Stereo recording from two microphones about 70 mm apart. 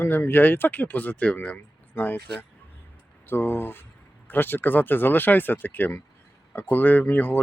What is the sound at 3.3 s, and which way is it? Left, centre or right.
A man's voice, left.